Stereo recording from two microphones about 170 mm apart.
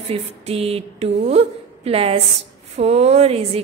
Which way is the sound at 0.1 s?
35° right (ahead or behind).